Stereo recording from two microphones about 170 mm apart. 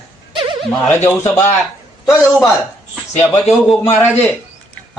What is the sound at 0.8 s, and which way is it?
Speech, 15° left (ahead or behind).